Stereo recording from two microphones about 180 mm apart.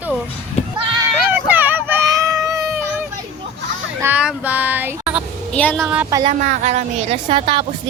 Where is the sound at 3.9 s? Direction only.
10° right (ahead or behind).